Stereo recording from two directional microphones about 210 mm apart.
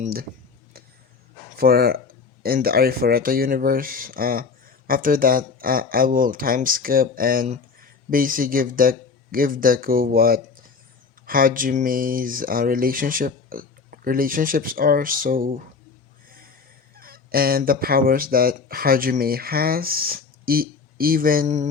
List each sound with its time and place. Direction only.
0.0 s speech: 45° right (ahead or behind)
1.5 s speech: 45° right (ahead or behind)
17.0 s speech: 45° right (ahead or behind)